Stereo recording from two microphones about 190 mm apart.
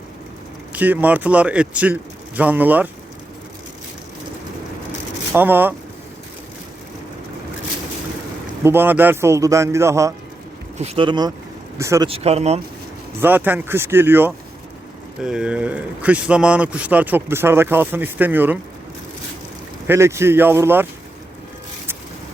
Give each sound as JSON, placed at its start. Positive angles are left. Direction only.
{"t": 0.7, "sound": "a man's voice", "side_deg": -10}
{"t": 5.3, "sound": "a man's voice", "side_deg": -10}
{"t": 8.6, "sound": "a man's voice", "side_deg": -10}
{"t": 10.8, "sound": "a man's voice", "side_deg": -30}
{"t": 12.0, "sound": "speech", "side_deg": -30}
{"t": 13.2, "sound": "a man's voice", "side_deg": -10}
{"t": 19.9, "sound": "a man's voice", "side_deg": -15}